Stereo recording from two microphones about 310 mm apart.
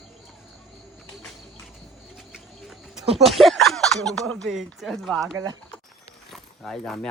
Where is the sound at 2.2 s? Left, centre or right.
Centre.